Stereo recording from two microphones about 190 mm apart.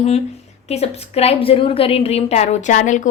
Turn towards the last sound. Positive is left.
turn(degrees=40)  # may be behind; listen again after turning